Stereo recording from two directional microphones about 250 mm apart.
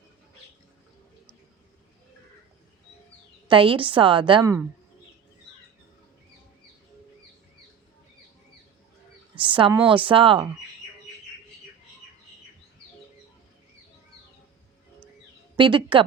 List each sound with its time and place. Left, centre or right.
3.5 s a woman's voice: right
9.4 s a sound: centre
9.8 s a woman's voice: centre
15.5 s a woman's voice: centre